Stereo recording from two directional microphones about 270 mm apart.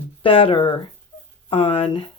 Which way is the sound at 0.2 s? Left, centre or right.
Centre.